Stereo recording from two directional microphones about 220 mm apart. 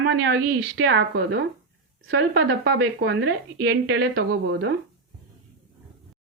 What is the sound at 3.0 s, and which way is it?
Speech, 45° right (ahead or behind).